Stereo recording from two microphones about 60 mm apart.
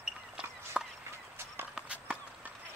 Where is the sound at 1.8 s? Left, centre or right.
Centre.